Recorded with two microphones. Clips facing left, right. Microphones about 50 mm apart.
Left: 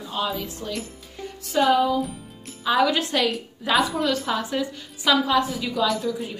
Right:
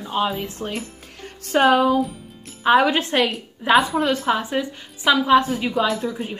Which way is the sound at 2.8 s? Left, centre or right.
Right.